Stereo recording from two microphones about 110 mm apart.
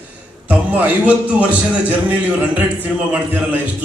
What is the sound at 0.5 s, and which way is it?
A man's voice, 15° right (ahead or behind).